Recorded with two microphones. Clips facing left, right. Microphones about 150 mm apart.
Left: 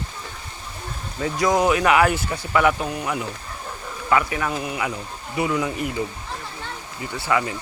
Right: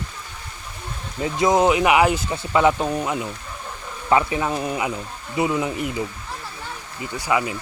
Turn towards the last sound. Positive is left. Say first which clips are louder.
# even
turn(degrees=-15)  # may be behind; listen again after turning